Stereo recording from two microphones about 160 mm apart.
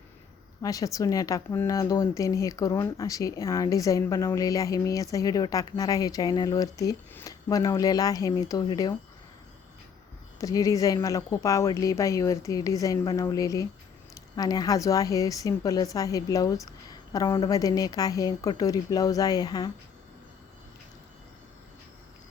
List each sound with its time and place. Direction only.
0.6 s a woman's voice: 20° left (ahead or behind)
10.4 s a woman's voice: 20° left (ahead or behind)